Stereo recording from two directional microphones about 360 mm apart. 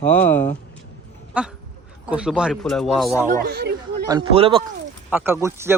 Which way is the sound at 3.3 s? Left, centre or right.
Right.